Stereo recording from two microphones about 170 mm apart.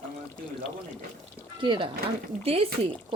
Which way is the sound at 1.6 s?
30° right (ahead or behind).